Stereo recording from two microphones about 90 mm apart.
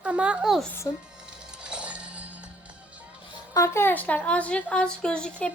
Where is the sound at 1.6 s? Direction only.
10° right (ahead or behind).